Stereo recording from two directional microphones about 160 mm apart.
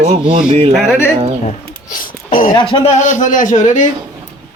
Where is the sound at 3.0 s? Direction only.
50° left (ahead or behind).